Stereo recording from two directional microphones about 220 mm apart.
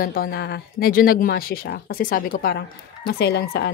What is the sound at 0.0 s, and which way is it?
Speech, 40° left (ahead or behind).